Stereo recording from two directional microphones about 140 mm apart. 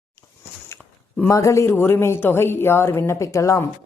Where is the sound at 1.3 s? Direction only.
20° left (ahead or behind).